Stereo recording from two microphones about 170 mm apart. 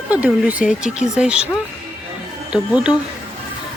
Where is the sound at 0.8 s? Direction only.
45° left (ahead or behind).